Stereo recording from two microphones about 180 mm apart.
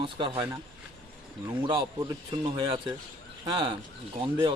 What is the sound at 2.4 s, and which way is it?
A man's voice, 30° right (ahead or behind).